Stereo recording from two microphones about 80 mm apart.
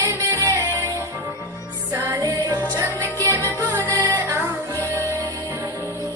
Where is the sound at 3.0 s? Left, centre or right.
Left.